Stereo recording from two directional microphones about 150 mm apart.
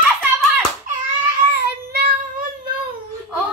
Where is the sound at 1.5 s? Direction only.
90° right.